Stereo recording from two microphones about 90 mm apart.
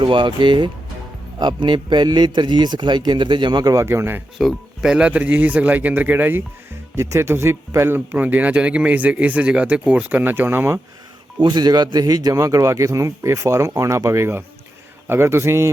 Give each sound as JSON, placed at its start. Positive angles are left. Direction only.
{"t": 0.0, "sound": "a man's voice", "side_deg": -65}
{"t": 3.8, "sound": "a man's voice", "side_deg": -25}
{"t": 4.4, "sound": "speech", "side_deg": -5}
{"t": 6.9, "sound": "speech", "side_deg": -30}
{"t": 11.3, "sound": "a man's voice", "side_deg": -55}